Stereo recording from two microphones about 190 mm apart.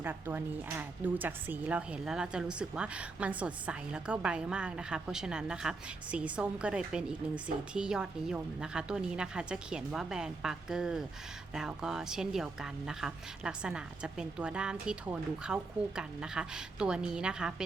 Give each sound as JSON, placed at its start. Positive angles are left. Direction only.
{"t": 0.0, "sound": "speech", "side_deg": -10}